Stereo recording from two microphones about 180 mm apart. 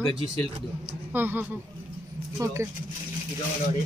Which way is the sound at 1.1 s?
10° right (ahead or behind).